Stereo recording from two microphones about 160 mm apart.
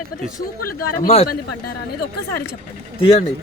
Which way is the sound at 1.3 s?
90° left.